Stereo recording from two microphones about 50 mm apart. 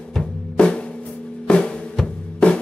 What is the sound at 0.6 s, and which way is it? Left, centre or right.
Drum, centre.